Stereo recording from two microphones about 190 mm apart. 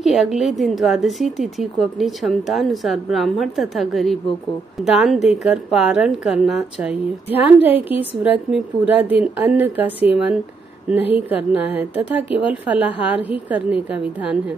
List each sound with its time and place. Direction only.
0.0 s a woman's voice: centre (ahead or behind)